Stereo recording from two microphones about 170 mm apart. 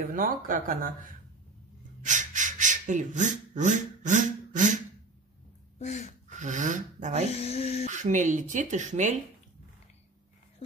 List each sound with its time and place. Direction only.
0.0 s speech: 55° right (ahead or behind)
5.8 s speech: 45° left (ahead or behind)
6.2 s speech: 45° right (ahead or behind)
7.2 s speech: 40° left (ahead or behind)
7.9 s speech: 45° right (ahead or behind)